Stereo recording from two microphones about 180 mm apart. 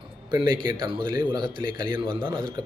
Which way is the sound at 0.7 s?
25° right (ahead or behind).